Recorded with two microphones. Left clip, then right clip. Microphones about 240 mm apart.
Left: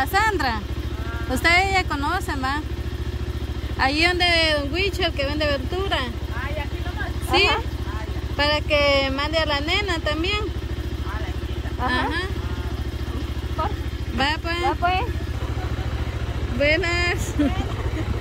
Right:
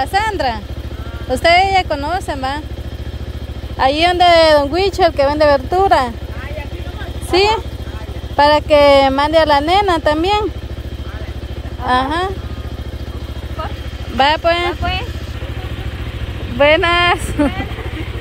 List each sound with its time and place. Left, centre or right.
0.0 s speech: centre
3.8 s speech: centre
7.2 s speech: centre
11.9 s speech: centre
14.1 s speech: centre
16.6 s speech: centre